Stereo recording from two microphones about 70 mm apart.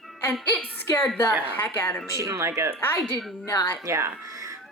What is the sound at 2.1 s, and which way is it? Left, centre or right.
Speech, right.